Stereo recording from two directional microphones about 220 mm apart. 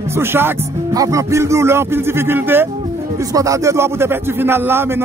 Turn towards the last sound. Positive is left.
turn(degrees=-10)  # may be behind; listen again after turning